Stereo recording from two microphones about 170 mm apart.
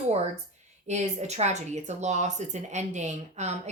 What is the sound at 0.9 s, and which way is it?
A woman's voice, 40° right (ahead or behind).